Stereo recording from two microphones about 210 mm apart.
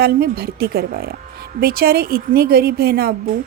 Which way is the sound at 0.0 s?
45° right (ahead or behind).